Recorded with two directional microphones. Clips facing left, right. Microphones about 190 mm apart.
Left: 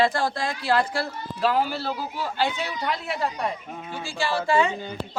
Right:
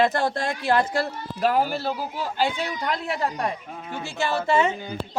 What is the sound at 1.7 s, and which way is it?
Speech, 15° right (ahead or behind).